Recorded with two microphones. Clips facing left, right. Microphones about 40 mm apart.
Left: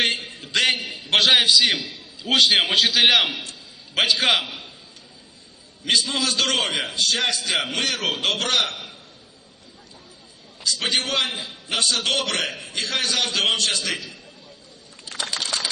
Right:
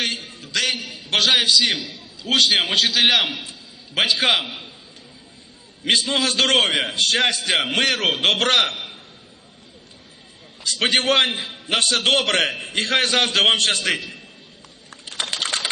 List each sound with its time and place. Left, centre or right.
0.0 s a sound: left
0.9 s a man's voice: centre
5.8 s a man's voice: right
10.6 s a man's voice: right
15.2 s typing: right